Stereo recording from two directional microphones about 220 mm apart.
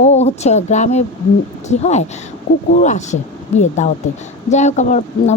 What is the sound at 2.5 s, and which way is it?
Speech, 50° left (ahead or behind).